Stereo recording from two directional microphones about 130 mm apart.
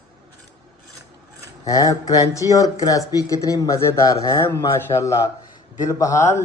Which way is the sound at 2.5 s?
25° left (ahead or behind).